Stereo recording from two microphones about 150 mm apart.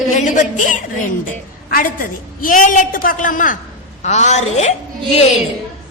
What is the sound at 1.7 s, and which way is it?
A woman's voice, 75° left (ahead or behind).